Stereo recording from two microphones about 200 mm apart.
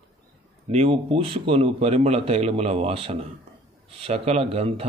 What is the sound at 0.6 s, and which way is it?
A man's voice, 30° right (ahead or behind).